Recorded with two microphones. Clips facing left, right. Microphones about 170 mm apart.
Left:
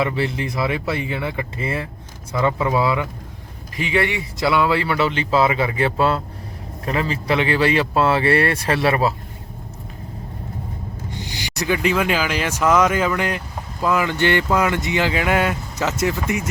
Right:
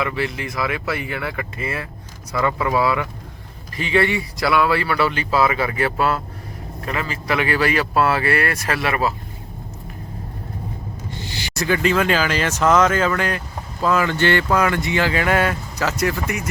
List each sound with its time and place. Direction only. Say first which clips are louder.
0.0 s speech: left 2 dB; 30° left (ahead or behind)
11.1 s speech: right 1 dB; 15° left (ahead or behind)